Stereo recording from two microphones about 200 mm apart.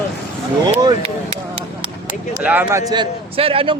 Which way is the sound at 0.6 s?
25° right (ahead or behind).